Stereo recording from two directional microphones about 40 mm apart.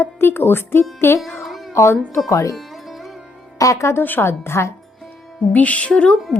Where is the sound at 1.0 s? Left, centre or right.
Left.